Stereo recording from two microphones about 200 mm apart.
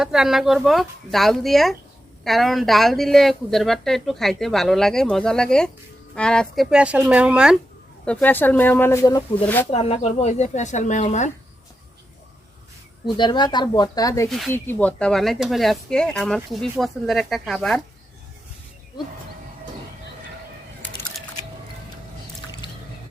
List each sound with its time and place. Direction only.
0.0 s speech: 5° right (ahead or behind)
8.0 s speech: 5° left (ahead or behind)
9.7 s speech: 30° left (ahead or behind)
13.1 s speech: 20° left (ahead or behind)
14.3 s speech: centre (ahead or behind)